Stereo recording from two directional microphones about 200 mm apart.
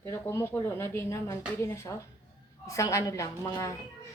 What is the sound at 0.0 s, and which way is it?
Speech, 15° left (ahead or behind).